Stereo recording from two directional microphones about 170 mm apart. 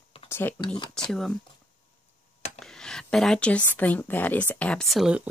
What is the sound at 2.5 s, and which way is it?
Speech, 5° left (ahead or behind).